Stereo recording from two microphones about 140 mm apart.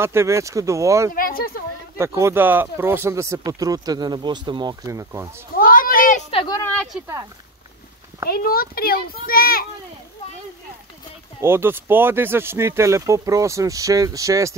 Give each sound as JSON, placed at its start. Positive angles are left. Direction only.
{"t": 0.0, "sound": "speech", "side_deg": -20}
{"t": 1.1, "sound": "a child's voice", "side_deg": 90}
{"t": 2.0, "sound": "speech", "side_deg": -20}
{"t": 5.6, "sound": "a sound", "side_deg": 85}
{"t": 6.3, "sound": "a woman's voice", "side_deg": 30}
{"t": 6.6, "sound": "a sound", "side_deg": 10}
{"t": 8.3, "sound": "a child's voice", "side_deg": 90}
{"t": 11.4, "sound": "speech", "side_deg": -15}